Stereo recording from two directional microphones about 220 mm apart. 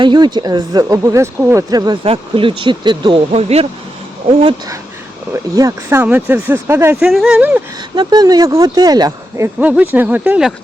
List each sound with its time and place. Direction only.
0.0 s speech: 20° right (ahead or behind)
5.3 s speech: 15° right (ahead or behind)
7.9 s speech: 20° right (ahead or behind)